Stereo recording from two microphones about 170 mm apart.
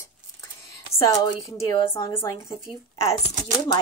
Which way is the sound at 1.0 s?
20° left (ahead or behind).